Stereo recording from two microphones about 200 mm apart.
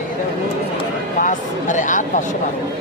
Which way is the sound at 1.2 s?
40° left (ahead or behind).